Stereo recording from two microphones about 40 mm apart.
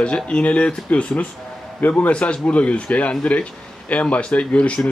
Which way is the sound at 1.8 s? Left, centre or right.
Left.